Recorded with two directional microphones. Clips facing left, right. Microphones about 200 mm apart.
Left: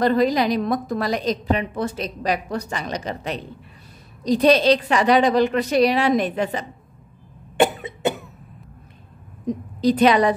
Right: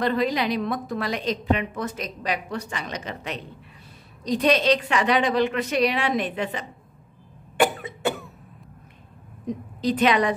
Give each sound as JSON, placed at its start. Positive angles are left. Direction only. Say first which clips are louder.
{"t": 0.0, "sound": "a woman's voice", "louder": "left 5 dB", "side_deg": 40}
{"t": 7.5, "sound": "cough", "louder": "left 3 dB", "side_deg": 25}
{"t": 9.8, "sound": "a woman's voice", "louder": "left 5 dB", "side_deg": 40}